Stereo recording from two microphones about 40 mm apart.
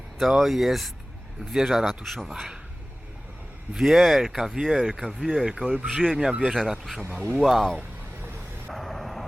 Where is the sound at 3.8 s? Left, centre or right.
Centre.